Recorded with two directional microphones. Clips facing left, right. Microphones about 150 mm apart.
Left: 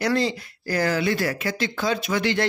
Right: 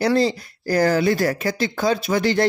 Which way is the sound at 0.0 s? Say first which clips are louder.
Right 4 dB; 35° right (ahead or behind).